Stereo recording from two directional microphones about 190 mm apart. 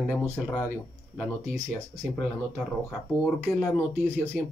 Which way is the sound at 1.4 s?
15° right (ahead or behind).